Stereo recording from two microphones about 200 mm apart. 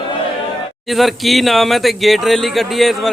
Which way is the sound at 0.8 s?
Centre (ahead or behind).